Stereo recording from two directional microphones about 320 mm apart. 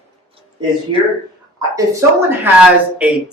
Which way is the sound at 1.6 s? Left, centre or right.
Centre.